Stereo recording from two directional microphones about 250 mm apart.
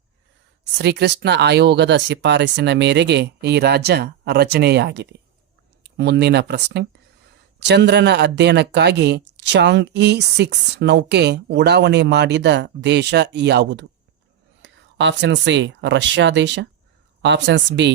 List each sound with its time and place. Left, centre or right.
0.8 s speech: right